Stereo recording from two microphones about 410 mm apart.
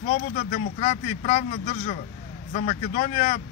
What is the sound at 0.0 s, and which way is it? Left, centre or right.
Speech, centre.